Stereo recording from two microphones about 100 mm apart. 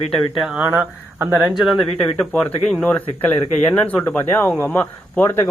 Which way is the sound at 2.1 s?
10° left (ahead or behind).